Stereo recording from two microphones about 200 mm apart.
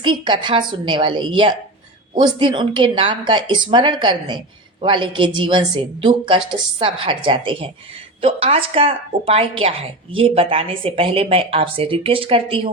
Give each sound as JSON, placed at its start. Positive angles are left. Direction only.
{"t": 0.0, "sound": "a woman's voice", "side_deg": -25}